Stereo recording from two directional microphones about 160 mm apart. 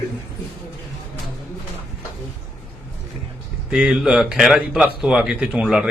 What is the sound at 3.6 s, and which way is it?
Speech, 5° right (ahead or behind).